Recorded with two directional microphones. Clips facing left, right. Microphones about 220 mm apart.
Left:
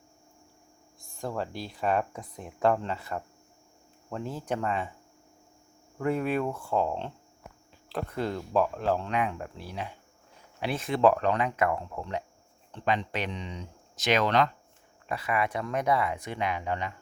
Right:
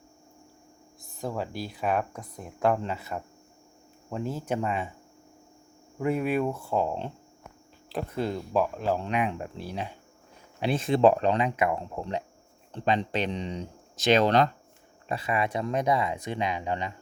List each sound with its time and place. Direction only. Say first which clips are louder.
1.1 s speech: right 1 dB; 5° right (ahead or behind)
6.0 s speech: right 2 dB; 10° right (ahead or behind)
8.2 s speech: even; 10° right (ahead or behind)
9.0 s speech: right 2 dB; 20° right (ahead or behind)